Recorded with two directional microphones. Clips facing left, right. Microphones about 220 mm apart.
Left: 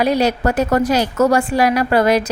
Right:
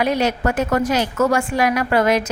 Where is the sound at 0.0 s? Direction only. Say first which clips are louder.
Left 3 dB; 35° left (ahead or behind).